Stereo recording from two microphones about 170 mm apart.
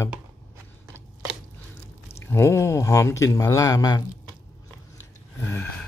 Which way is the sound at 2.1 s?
15° left (ahead or behind).